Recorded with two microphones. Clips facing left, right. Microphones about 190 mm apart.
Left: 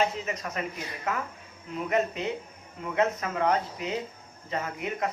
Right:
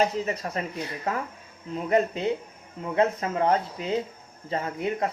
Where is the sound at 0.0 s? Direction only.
35° right (ahead or behind).